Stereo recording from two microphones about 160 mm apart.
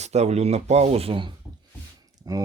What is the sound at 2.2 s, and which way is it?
Speech, 25° right (ahead or behind).